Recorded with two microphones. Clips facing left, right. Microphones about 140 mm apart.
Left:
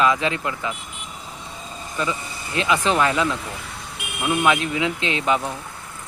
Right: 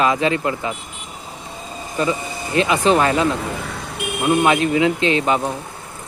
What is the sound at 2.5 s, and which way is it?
Speech, 40° right (ahead or behind).